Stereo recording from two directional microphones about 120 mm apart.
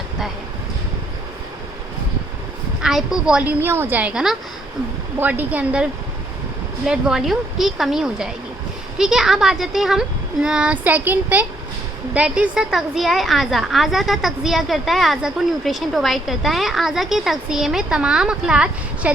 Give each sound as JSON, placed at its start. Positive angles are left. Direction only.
{"t": 2.8, "sound": "a woman's voice", "side_deg": -5}